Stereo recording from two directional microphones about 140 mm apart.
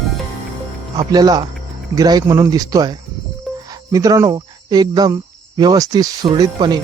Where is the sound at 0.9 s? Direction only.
30° right (ahead or behind).